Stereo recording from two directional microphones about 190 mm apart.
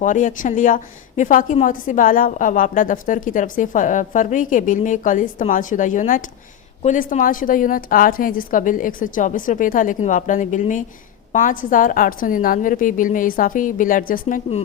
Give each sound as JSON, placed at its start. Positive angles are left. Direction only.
{"t": 0.0, "sound": "a woman's voice", "side_deg": 40}